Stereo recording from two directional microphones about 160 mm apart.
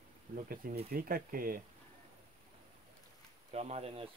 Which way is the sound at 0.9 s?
65° right (ahead or behind).